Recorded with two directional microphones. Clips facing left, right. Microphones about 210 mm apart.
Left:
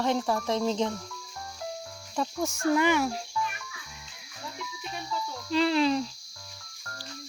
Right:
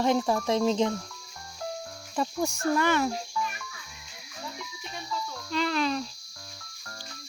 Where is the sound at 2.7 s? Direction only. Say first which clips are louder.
Left 2 dB; 15° left (ahead or behind).